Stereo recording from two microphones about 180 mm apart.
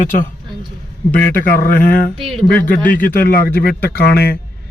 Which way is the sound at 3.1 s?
55° left (ahead or behind).